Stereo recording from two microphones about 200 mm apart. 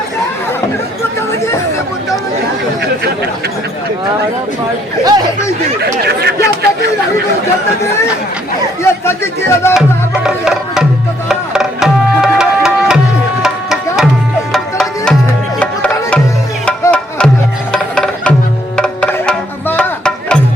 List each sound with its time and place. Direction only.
5.8 s chatter: 50° right (ahead or behind)
8.8 s speech: 15° left (ahead or behind)
10.2 s music: 5° right (ahead or behind)
13.4 s tabla: centre (ahead or behind)
14.5 s music: 5° left (ahead or behind)